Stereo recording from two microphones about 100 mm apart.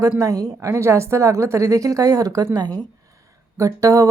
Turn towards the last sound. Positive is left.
turn(degrees=-30)  # may be behind; listen again after turning